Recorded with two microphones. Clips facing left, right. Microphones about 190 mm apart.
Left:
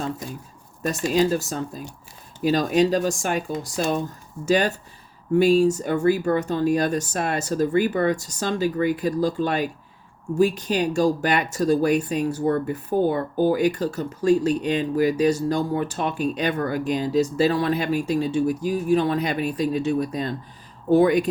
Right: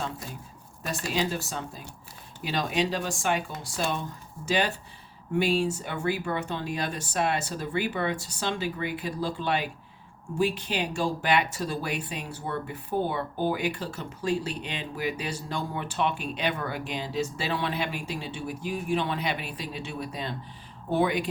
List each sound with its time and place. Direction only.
0.8 s speech: 45° left (ahead or behind)